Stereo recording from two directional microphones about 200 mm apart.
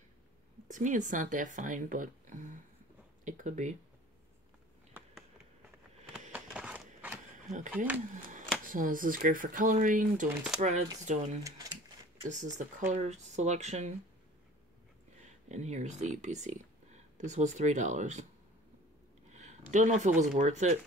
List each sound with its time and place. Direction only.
0.7 s speech: 40° right (ahead or behind)
6.3 s a sound: 5° right (ahead or behind)
7.7 s speech: 10° right (ahead or behind)
8.6 s speech: 40° right (ahead or behind)
11.4 s a sound: 15° right (ahead or behind)
12.3 s speech: 35° right (ahead or behind)
15.4 s speech: 35° right (ahead or behind)
19.3 s speech: 35° right (ahead or behind)